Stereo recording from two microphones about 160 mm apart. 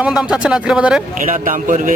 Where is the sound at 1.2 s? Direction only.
55° right (ahead or behind).